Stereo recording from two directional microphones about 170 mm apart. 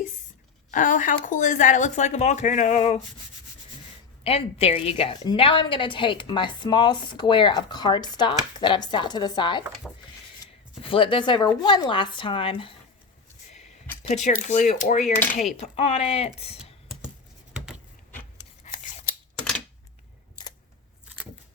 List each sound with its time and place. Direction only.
0.7 s speech: 50° left (ahead or behind)
4.2 s a woman's voice: 35° left (ahead or behind)
9.8 s a sound: 5° left (ahead or behind)
10.4 s a sound: 30° left (ahead or behind)
11.6 s speech: 25° left (ahead or behind)
14.0 s speech: 40° left (ahead or behind)
18.6 s scissors: 45° left (ahead or behind)
19.4 s typewriter: 5° left (ahead or behind)